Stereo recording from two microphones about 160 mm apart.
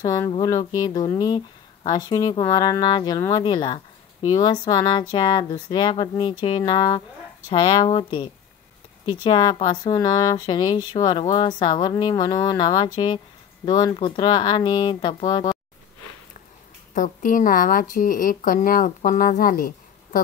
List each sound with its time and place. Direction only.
0.0 s speech: 20° left (ahead or behind)
16.9 s speech: 55° left (ahead or behind)